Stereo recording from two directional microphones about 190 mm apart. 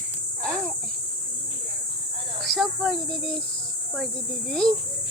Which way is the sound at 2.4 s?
Centre (ahead or behind).